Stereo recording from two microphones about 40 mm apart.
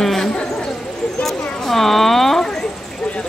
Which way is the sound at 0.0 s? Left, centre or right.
Centre.